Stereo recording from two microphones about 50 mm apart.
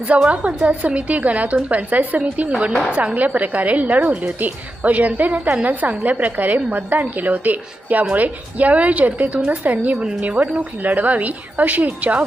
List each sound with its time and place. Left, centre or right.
0.1 s a woman's voice: right